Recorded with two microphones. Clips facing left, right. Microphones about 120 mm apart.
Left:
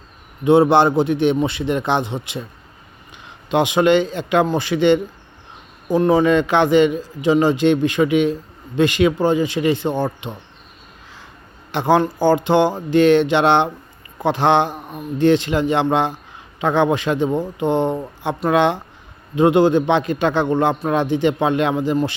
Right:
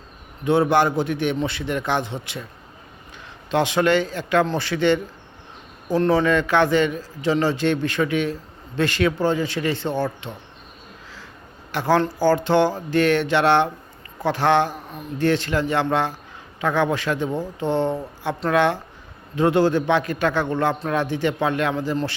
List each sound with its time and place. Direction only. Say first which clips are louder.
0.4 s a man's voice: left 5 dB; 20° left (ahead or behind)
11.7 s a man's voice: left 3 dB; 20° left (ahead or behind)